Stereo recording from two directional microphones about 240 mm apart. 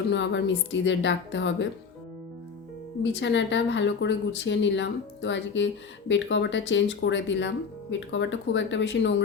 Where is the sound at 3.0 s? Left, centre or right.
Left.